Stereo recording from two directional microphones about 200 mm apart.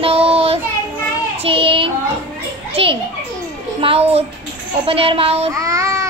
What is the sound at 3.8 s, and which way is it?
Child singing, 30° right (ahead or behind).